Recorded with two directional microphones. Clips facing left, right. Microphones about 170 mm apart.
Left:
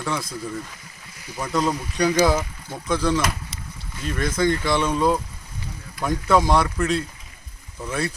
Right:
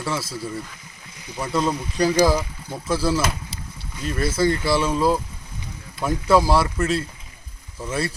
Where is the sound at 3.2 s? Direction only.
30° right (ahead or behind).